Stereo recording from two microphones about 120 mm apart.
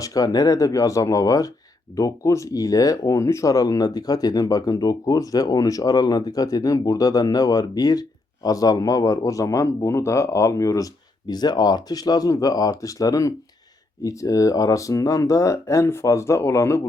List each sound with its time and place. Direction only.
0.0 s speech: 30° left (ahead or behind)